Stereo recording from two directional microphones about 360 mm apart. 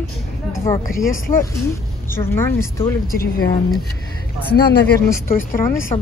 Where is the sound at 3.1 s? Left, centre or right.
Left.